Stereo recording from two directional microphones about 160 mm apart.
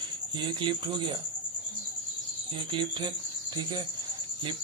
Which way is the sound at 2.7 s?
30° right (ahead or behind).